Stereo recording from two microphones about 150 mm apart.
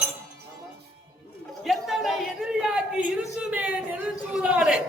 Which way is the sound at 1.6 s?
Centre (ahead or behind).